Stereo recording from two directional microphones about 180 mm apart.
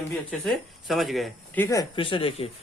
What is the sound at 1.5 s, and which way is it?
Speech, 15° left (ahead or behind).